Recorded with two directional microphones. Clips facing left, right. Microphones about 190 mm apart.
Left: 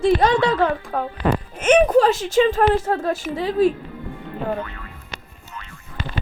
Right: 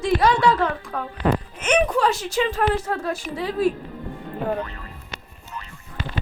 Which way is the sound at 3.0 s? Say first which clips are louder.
Left 4 dB; 25° left (ahead or behind).